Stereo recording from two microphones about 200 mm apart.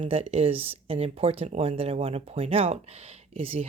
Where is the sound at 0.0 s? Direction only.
30° right (ahead or behind).